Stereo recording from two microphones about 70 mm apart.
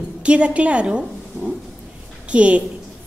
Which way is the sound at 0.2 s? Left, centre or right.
Centre.